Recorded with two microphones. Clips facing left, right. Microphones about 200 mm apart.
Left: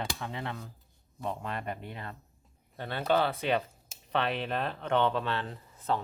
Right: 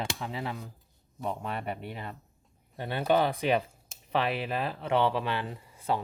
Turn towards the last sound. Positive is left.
turn(degrees=-10)  # may be behind; listen again after turning